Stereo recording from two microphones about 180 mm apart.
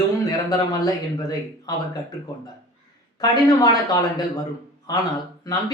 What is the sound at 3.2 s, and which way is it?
Speech, 20° left (ahead or behind).